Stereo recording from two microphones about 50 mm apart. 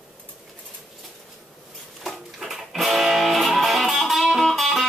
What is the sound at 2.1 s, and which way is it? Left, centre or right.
Music, centre.